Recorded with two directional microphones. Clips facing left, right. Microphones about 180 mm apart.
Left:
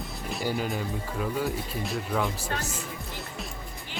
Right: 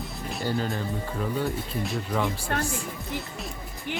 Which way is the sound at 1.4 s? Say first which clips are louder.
Right 1 dB; centre (ahead or behind).